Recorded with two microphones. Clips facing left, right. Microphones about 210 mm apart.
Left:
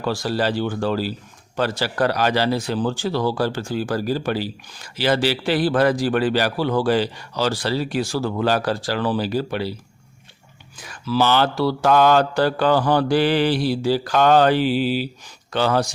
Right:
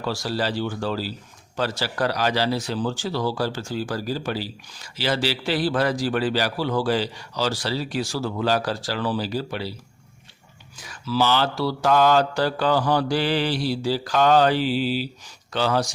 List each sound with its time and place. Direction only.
0.0 s a man's voice: 55° left (ahead or behind)
10.8 s a man's voice: 55° left (ahead or behind)